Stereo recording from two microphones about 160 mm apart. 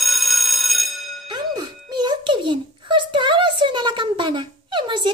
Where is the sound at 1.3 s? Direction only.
25° right (ahead or behind).